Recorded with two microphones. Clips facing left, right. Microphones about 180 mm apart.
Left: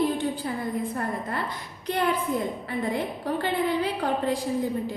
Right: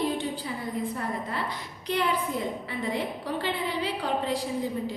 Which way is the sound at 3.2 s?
50° left (ahead or behind).